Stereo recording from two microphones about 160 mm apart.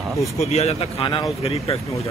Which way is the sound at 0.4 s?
40° left (ahead or behind).